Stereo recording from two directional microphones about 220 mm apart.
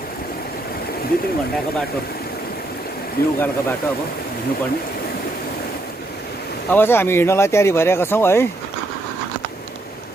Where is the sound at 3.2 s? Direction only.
45° left (ahead or behind).